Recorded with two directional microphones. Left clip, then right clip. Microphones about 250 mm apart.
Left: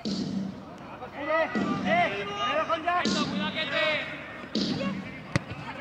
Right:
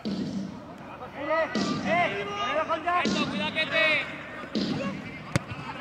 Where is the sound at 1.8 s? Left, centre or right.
Centre.